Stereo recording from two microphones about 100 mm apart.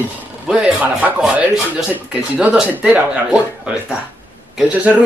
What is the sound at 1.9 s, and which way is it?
Speech, 15° right (ahead or behind).